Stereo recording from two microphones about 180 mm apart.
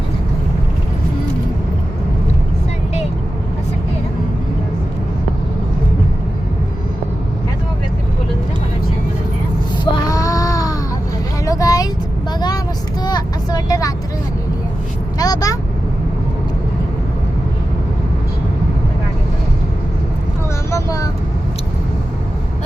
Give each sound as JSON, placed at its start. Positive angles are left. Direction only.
{"t": 9.8, "sound": "music", "side_deg": 20}
{"t": 11.4, "sound": "vehicle", "side_deg": 20}
{"t": 15.2, "sound": "vehicle", "side_deg": 20}
{"t": 20.7, "sound": "vehicle", "side_deg": 15}